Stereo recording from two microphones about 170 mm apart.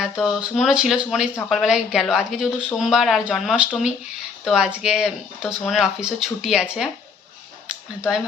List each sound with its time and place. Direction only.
0.0 s speech: 5° right (ahead or behind)